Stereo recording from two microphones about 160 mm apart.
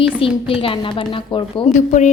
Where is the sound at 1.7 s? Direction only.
50° left (ahead or behind).